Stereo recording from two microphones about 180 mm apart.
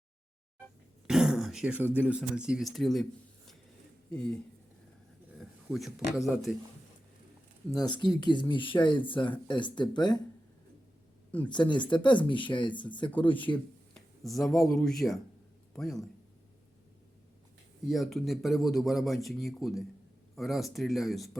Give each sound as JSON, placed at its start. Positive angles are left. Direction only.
{"t": 1.0, "sound": "throat clearing", "side_deg": 0}
{"t": 2.0, "sound": "speech", "side_deg": -5}
{"t": 5.4, "sound": "speech", "side_deg": 0}
{"t": 7.8, "sound": "speech", "side_deg": 25}
{"t": 11.7, "sound": "speech", "side_deg": 25}
{"t": 13.9, "sound": "speech", "side_deg": 0}
{"t": 17.8, "sound": "speech", "side_deg": 0}